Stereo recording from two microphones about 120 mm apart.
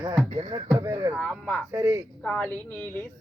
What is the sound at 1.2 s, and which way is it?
Speech, 10° left (ahead or behind).